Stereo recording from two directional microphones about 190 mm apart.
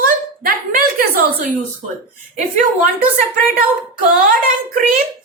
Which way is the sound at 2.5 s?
50° right (ahead or behind).